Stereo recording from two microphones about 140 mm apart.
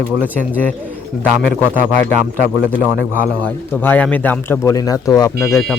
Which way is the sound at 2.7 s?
10° left (ahead or behind).